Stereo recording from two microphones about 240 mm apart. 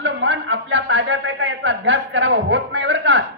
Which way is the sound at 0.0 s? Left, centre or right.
Right.